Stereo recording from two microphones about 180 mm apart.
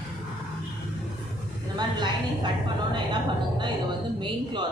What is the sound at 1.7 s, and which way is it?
Speech, 25° right (ahead or behind).